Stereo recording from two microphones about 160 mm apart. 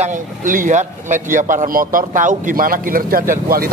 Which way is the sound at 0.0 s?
55° right (ahead or behind).